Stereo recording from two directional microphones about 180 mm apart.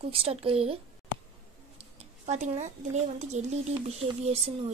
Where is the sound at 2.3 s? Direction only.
40° right (ahead or behind).